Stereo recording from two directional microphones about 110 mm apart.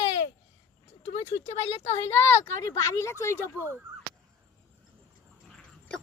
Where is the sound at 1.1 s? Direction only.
80° left.